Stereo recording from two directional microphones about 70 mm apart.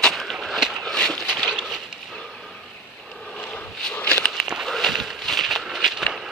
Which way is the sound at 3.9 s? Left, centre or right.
Centre.